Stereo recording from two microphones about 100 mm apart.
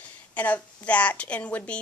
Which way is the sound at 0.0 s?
15° left (ahead or behind).